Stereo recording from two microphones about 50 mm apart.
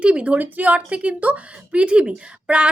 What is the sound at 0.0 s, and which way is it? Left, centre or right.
Speech, right.